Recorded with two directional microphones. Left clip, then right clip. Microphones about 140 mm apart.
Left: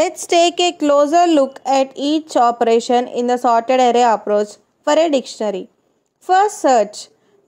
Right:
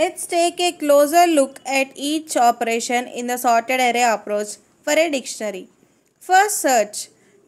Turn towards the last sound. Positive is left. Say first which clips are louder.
# left 4 dB
turn(degrees=40)  # may be behind; listen again after turning